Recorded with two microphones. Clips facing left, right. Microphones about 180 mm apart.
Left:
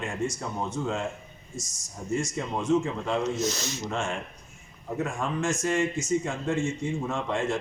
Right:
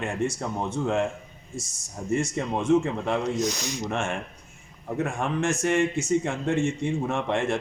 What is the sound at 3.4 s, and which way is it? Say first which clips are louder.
Speech: right 2 dB; 15° right (ahead or behind).